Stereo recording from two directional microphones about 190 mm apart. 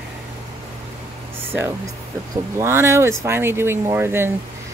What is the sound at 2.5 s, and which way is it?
Speech, 15° right (ahead or behind).